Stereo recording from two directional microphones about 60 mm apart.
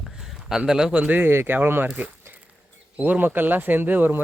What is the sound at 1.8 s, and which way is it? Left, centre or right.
Speech, right.